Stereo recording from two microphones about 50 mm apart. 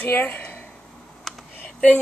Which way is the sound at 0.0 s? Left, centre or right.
Left.